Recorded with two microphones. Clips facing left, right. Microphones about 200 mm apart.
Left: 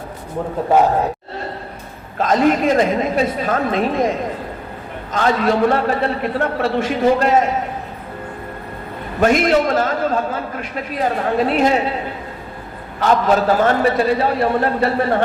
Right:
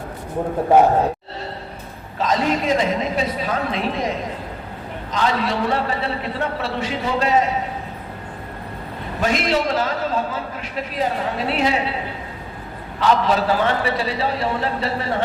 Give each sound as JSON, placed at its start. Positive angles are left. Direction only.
{"t": 2.1, "sound": "a man's voice", "side_deg": 50}
{"t": 5.1, "sound": "a man's voice", "side_deg": 50}
{"t": 9.2, "sound": "a man's voice", "side_deg": 50}
{"t": 13.0, "sound": "a man's voice", "side_deg": 50}